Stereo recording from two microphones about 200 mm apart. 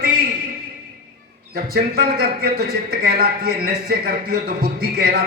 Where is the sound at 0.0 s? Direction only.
45° right (ahead or behind).